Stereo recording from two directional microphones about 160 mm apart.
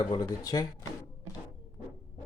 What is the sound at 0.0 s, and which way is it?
Speech, 25° left (ahead or behind).